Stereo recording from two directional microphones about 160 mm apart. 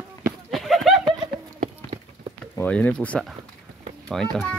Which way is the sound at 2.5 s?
10° left (ahead or behind).